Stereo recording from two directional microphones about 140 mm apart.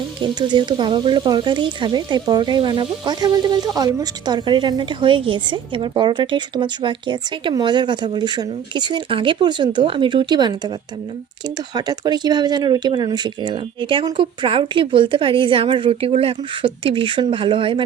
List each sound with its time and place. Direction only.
0.2 s a woman's voice: 35° right (ahead or behind)